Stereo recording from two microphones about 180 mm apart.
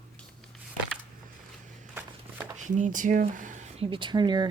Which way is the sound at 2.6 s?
45° right (ahead or behind).